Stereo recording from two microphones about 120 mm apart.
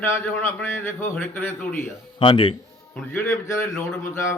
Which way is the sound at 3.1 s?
20° left (ahead or behind).